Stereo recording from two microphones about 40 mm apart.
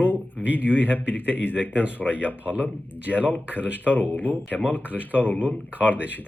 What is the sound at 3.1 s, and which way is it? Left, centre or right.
Speech, left.